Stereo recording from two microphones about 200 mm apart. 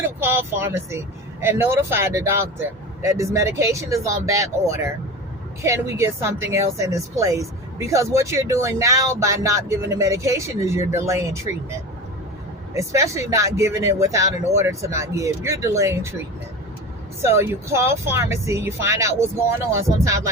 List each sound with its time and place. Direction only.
0.2 s speech: 10° right (ahead or behind)
12.7 s speech: 15° right (ahead or behind)
17.3 s speech: 10° right (ahead or behind)